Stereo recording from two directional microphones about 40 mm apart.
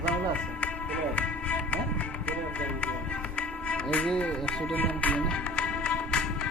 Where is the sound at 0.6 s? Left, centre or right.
Left.